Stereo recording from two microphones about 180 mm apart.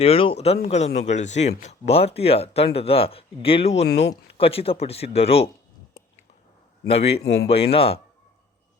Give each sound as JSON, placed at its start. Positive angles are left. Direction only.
{"t": 0.0, "sound": "speech", "side_deg": 30}
{"t": 3.8, "sound": "speech", "side_deg": 70}
{"t": 4.1, "sound": "speech", "side_deg": 30}
{"t": 6.9, "sound": "speech", "side_deg": 35}
{"t": 7.2, "sound": "speech", "side_deg": 65}
{"t": 7.4, "sound": "speech", "side_deg": 35}